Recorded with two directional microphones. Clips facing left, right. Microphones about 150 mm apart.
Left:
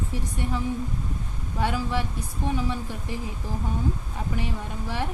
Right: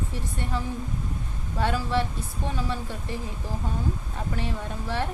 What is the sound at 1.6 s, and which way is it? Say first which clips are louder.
A woman's voice: right 1 dB; 15° left (ahead or behind).